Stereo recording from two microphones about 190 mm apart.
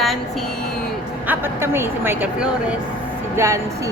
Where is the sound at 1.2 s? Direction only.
10° right (ahead or behind).